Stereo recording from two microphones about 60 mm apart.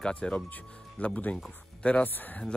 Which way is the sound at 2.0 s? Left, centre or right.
Left.